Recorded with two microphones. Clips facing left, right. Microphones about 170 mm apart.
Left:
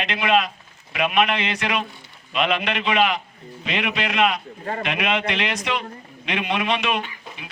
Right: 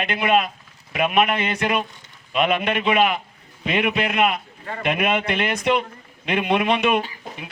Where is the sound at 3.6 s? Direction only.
50° right (ahead or behind).